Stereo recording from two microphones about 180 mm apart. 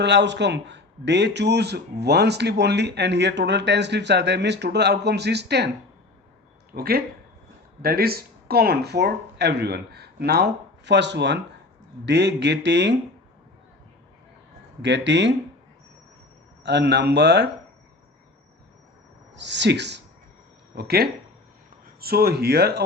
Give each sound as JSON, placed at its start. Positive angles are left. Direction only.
{"t": 0.0, "sound": "a man's voice", "side_deg": -75}
{"t": 6.7, "sound": "a man's voice", "side_deg": -60}
{"t": 14.8, "sound": "a man's voice", "side_deg": -75}
{"t": 16.6, "sound": "a man's voice", "side_deg": -70}
{"t": 19.4, "sound": "a man's voice", "side_deg": -75}
{"t": 20.7, "sound": "speech", "side_deg": -60}